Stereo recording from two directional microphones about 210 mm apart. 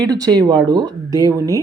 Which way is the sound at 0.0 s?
15° right (ahead or behind).